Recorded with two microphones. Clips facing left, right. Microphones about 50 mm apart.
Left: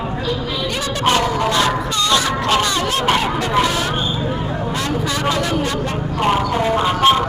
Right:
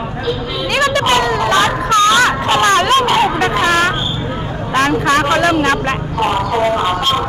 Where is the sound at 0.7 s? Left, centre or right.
Right.